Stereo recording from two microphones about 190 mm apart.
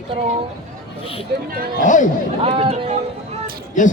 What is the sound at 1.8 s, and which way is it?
Speech, 40° left (ahead or behind).